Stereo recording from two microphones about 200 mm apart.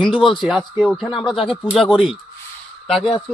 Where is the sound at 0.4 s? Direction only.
5° right (ahead or behind).